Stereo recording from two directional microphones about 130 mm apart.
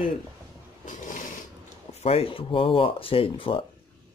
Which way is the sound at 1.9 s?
55° left (ahead or behind).